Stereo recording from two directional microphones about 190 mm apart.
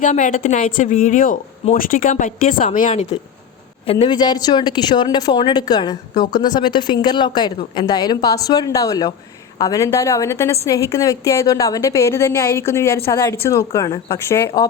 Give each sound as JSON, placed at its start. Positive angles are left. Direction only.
{"t": 0.0, "sound": "a woman's voice", "side_deg": 40}